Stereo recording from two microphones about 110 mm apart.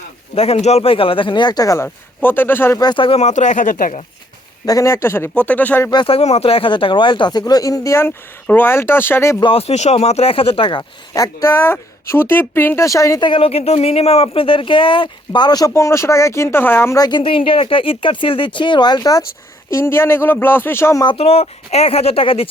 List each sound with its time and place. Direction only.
0.3 s speech: 70° left (ahead or behind); by 1.9 s 30° left (ahead or behind)
2.2 s speech: 20° left (ahead or behind)
2.8 s speech: 50° left (ahead or behind)
3.2 s speech: 90° left
4.6 s speech: 30° left (ahead or behind); by 5.9 s 15° left (ahead or behind)
6.1 s speech: 65° left (ahead or behind); by 9.4 s 25° left (ahead or behind)
9.4 s speech: 60° left (ahead or behind)
11.1 s speech: 30° left (ahead or behind)
13.2 s speech: 55° left (ahead or behind); by 15.7 s 40° left (ahead or behind)
15.7 s speech: 25° left (ahead or behind)
17.0 s speech: 45° left (ahead or behind)
19.7 s speech: 25° left (ahead or behind)
21.2 s speech: 65° left (ahead or behind)